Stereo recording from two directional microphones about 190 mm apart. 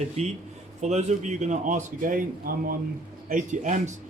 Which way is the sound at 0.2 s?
35° right (ahead or behind).